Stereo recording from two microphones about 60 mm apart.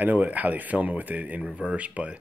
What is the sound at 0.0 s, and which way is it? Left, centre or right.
Speech, right.